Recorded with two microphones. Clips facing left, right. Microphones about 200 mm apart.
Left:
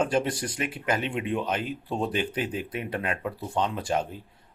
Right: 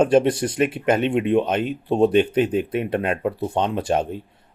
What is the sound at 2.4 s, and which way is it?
Speech, 65° right (ahead or behind).